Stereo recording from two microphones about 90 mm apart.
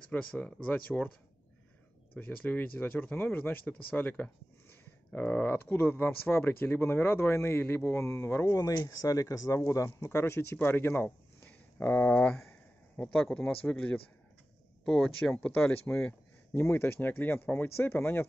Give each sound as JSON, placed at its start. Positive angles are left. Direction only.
{"t": 0.1, "sound": "speech", "side_deg": 15}
{"t": 2.1, "sound": "speech", "side_deg": 15}
{"t": 14.9, "sound": "speech", "side_deg": 5}
{"t": 15.3, "sound": "speech", "side_deg": 20}
{"t": 15.6, "sound": "speech", "side_deg": 10}
{"t": 16.5, "sound": "speech", "side_deg": 25}